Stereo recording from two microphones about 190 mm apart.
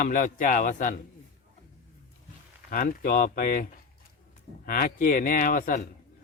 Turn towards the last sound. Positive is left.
turn(degrees=50)  # may be behind; listen again after turning